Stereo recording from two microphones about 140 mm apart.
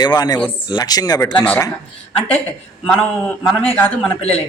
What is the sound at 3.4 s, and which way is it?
Speech, 15° left (ahead or behind).